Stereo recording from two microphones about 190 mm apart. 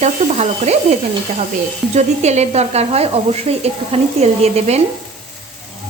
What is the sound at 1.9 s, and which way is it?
Frying, 35° right (ahead or behind).